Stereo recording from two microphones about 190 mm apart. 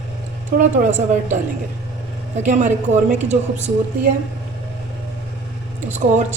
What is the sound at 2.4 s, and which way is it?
Speech, 40° right (ahead or behind).